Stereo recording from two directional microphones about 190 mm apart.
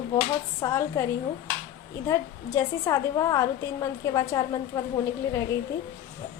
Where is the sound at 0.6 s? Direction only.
15° left (ahead or behind).